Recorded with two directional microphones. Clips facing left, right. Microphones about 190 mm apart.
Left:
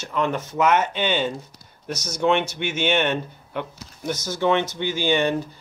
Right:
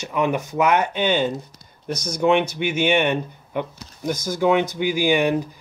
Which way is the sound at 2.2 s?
10° right (ahead or behind).